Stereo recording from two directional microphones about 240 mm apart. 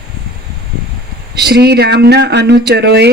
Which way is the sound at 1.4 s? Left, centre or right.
Right.